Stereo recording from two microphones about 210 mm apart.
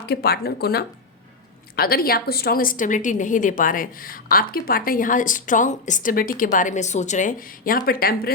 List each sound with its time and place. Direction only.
0.0 s a woman's voice: 50° left (ahead or behind)